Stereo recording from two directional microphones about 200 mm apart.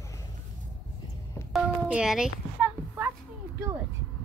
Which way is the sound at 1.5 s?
5° right (ahead or behind).